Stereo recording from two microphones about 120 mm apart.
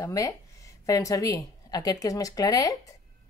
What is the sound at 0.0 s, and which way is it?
A woman's voice, 25° left (ahead or behind).